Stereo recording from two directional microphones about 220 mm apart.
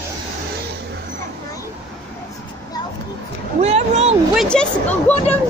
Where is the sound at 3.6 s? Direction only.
30° right (ahead or behind).